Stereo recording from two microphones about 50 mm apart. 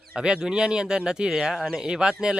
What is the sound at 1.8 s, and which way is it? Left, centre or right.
Speech, centre.